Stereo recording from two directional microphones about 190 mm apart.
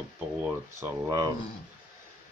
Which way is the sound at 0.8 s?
15° right (ahead or behind).